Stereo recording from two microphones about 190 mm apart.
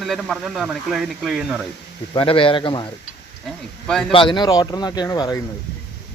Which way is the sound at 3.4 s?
Centre (ahead or behind).